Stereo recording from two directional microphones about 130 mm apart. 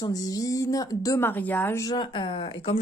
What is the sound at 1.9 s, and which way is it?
Speech, 35° left (ahead or behind).